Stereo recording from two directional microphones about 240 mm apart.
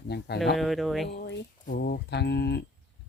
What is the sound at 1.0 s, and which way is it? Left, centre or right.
Speech, left.